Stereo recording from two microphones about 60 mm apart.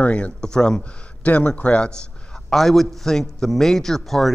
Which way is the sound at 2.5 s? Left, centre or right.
Centre.